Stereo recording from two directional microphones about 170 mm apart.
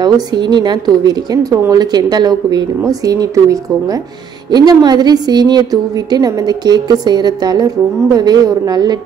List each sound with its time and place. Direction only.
0.0 s a woman's voice: 25° right (ahead or behind)